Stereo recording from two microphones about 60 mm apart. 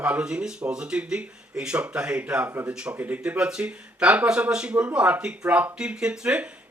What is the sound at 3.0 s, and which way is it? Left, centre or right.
Speech, right.